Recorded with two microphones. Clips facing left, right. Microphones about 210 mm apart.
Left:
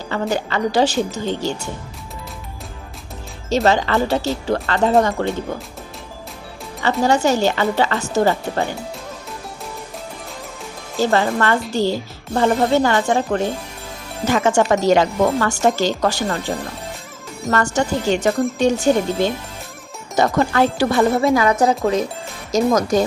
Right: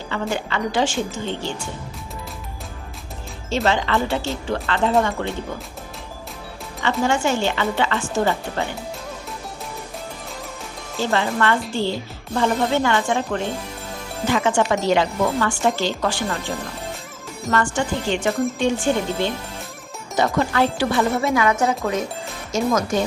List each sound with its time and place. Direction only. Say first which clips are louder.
0.1 s speech: left 4 dB; 40° left (ahead or behind)
3.5 s speech: left 4 dB; 40° left (ahead or behind)
7.0 s speech: left 4 dB; 40° left (ahead or behind)
11.0 s speech: left 3 dB; 40° left (ahead or behind)